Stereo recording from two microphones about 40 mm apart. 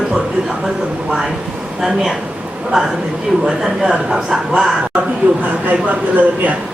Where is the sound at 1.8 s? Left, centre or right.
Centre.